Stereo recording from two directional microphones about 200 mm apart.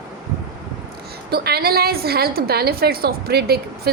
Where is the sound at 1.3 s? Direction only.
50° right (ahead or behind).